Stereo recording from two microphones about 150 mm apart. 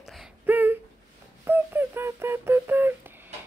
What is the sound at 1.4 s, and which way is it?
Beatboxing, 15° right (ahead or behind).